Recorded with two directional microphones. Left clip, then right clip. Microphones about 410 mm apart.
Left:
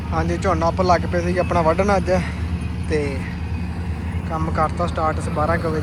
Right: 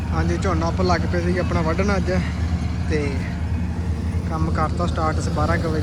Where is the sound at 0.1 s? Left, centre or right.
Centre.